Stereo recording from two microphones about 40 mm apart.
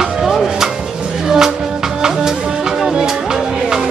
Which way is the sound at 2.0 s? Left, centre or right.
Centre.